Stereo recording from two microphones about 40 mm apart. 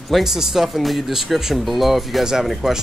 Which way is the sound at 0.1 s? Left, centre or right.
Centre.